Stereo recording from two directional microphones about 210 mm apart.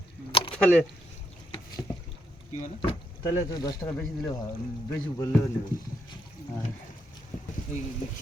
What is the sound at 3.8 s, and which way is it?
Speech, 5° left (ahead or behind).